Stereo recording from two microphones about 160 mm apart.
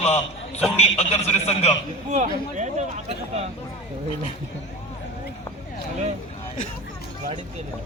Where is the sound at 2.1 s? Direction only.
50° right (ahead or behind).